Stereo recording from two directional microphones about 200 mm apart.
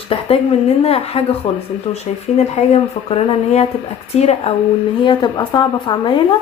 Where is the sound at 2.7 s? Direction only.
30° left (ahead or behind).